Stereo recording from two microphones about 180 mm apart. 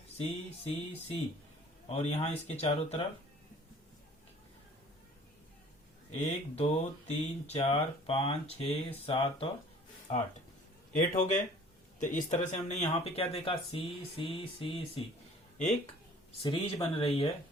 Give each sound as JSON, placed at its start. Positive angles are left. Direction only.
{"t": 0.2, "sound": "speech", "side_deg": 35}
{"t": 6.1, "sound": "speech", "side_deg": 35}
{"t": 10.9, "sound": "speech", "side_deg": 45}
{"t": 16.4, "sound": "speech", "side_deg": 25}